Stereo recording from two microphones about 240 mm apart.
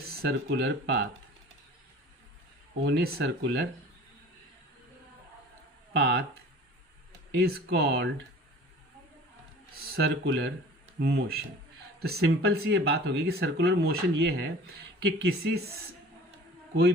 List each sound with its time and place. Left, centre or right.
0.2 s speech: right
2.8 s speech: right
5.9 s speech: right
7.3 s speech: right
9.9 s speech: right